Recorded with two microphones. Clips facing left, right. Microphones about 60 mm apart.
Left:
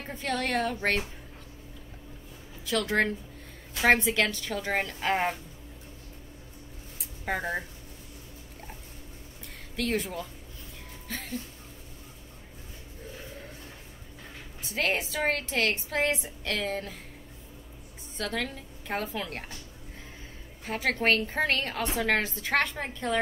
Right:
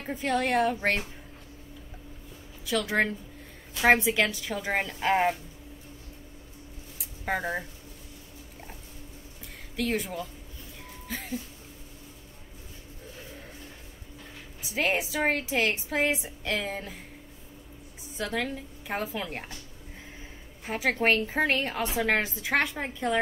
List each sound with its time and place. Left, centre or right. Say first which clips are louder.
0.0 s a woman's voice: right 3 dB; centre
2.6 s a woman's voice: even; centre
7.0 s a sound: right 1 dB; centre
9.8 s a woman's voice: even; centre
14.6 s a woman's voice: right 1 dB; centre
18.1 s a woman's voice: right 2 dB; centre
20.6 s a woman's voice: right 1 dB; centre